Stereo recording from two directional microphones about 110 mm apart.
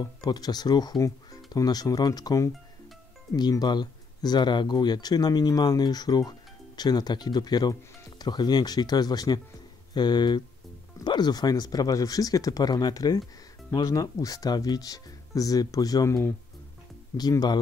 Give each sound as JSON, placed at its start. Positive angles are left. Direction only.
{"t": 0.0, "sound": "speech", "side_deg": 40}
{"t": 17.2, "sound": "speech", "side_deg": 35}